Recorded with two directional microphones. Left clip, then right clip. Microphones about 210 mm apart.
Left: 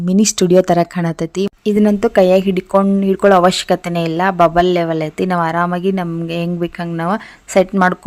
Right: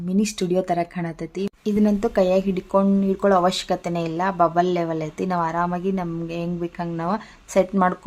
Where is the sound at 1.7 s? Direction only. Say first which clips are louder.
Left 7 dB; 30° left (ahead or behind).